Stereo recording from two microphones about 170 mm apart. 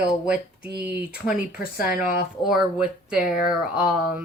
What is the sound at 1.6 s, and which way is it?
Speech, 60° left (ahead or behind).